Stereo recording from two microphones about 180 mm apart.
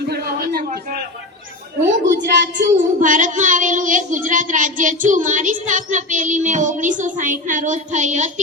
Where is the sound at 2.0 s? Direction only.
75° right (ahead or behind).